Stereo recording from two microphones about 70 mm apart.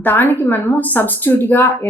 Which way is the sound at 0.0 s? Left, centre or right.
Left.